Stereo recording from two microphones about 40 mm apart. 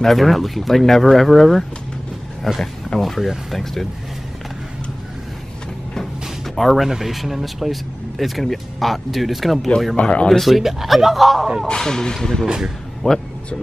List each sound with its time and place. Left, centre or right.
0.0 s speech: centre
6.4 s speech: centre
10.0 s speech: left
10.4 s speech: centre
11.6 s speech: centre
12.4 s speech: centre
13.0 s speech: centre